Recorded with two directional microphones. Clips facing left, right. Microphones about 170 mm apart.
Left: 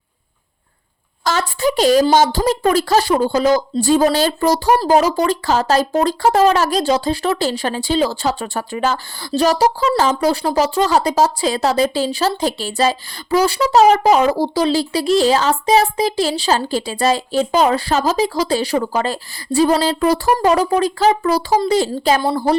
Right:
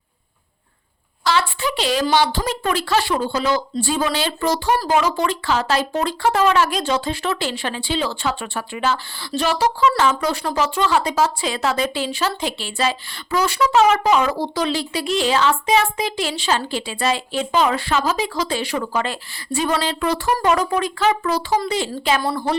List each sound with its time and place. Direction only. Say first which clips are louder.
1.2 s speech: left 3 dB; 45° left (ahead or behind)